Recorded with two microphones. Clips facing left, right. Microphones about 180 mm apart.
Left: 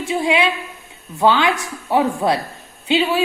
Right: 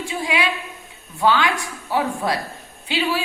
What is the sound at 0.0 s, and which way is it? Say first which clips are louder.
A woman's voice: left 5 dB; 25° left (ahead or behind).